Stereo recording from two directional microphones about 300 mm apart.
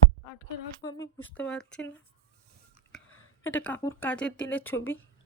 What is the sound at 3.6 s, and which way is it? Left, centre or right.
Speech, centre.